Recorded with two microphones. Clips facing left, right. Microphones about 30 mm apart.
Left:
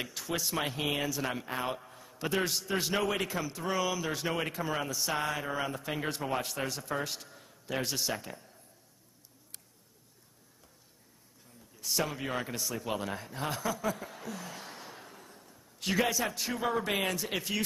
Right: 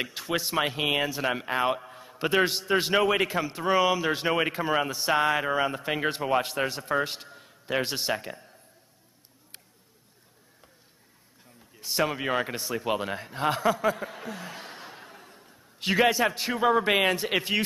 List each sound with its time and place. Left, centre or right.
0.0 s speech: right
11.7 s a man's voice: right